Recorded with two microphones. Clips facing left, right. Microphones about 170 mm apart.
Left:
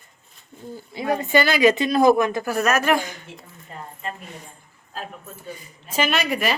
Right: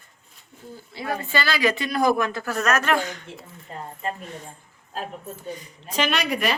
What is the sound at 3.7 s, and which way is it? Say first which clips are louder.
Speech: right 2 dB; 30° right (ahead or behind).